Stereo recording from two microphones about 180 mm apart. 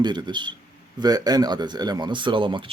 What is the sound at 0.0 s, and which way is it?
Speech, 25° right (ahead or behind).